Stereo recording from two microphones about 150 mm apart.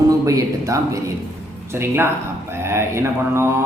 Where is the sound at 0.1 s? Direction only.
20° right (ahead or behind).